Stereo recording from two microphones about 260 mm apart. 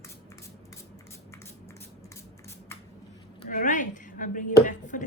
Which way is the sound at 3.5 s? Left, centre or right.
Left.